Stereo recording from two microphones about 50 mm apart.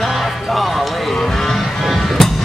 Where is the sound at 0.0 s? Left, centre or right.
Centre.